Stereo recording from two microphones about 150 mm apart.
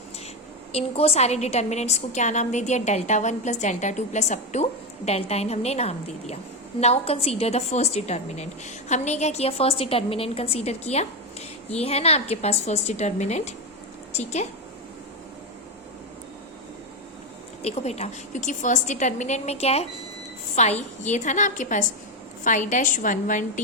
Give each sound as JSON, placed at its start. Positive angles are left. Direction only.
{"t": 0.7, "sound": "a woman's voice", "side_deg": 45}
{"t": 17.6, "sound": "a woman's voice", "side_deg": 45}